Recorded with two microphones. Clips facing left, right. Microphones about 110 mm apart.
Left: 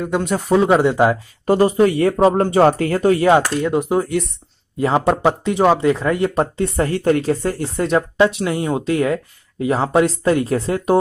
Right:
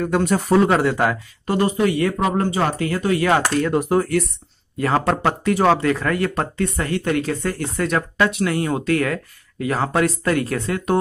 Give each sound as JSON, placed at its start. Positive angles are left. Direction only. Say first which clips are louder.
{"t": 0.0, "sound": "speech", "louder": "right 1 dB", "side_deg": 10}
{"t": 1.4, "sound": "speech", "louder": "left 5 dB", "side_deg": 40}
{"t": 3.3, "sound": "speech", "louder": "left 4 dB", "side_deg": 20}